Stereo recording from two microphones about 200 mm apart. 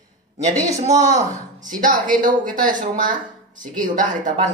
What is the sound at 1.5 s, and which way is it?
Speech, 40° right (ahead or behind).